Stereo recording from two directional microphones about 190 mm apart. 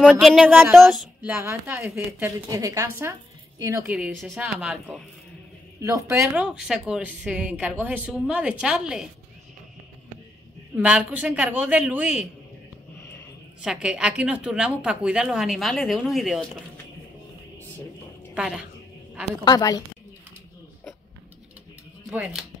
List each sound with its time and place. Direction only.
0.0 s speech: centre (ahead or behind); by 3.9 s 15° right (ahead or behind)
3.9 s a woman's voice: 5° right (ahead or behind)
10.8 s speech: 5° right (ahead or behind)
13.6 s a woman's voice: 5° right (ahead or behind)
18.3 s a woman's voice: 5° right (ahead or behind)
19.4 s a woman's voice: 20° left (ahead or behind)
22.1 s a woman's voice: 5° right (ahead or behind)